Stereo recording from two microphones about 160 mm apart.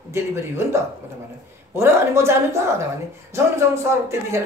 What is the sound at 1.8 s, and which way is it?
Speech, 15° right (ahead or behind).